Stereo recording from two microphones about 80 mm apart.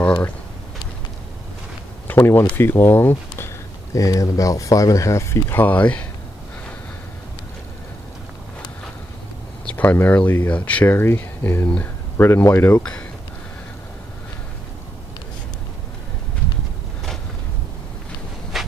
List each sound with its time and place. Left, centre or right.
2.0 s speech: left
3.9 s speech: left
5.5 s speech: left
9.8 s speech: left